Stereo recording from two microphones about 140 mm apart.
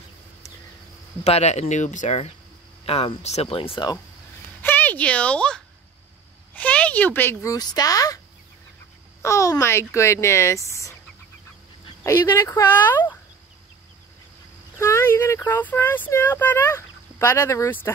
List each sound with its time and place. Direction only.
1.2 s speech: 50° left (ahead or behind)
4.6 s speech: 15° left (ahead or behind)
7.5 s speech: 25° left (ahead or behind)
9.2 s speech: 20° left (ahead or behind)
12.0 s speech: 20° left (ahead or behind)
14.8 s speech: 20° left (ahead or behind)